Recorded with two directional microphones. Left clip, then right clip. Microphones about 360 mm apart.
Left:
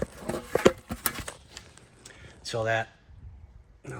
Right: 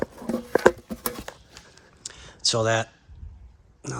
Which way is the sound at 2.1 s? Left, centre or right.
Centre.